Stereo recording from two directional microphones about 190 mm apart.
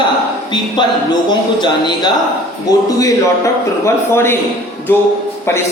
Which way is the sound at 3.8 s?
10° left (ahead or behind).